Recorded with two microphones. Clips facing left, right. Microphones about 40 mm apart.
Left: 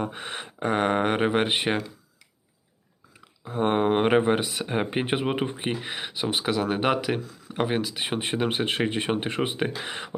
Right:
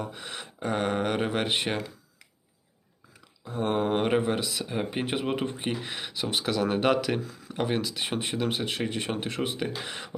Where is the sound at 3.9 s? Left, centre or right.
Centre.